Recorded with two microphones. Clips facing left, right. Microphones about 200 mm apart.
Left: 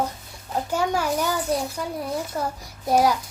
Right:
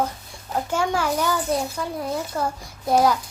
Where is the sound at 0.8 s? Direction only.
40° left (ahead or behind).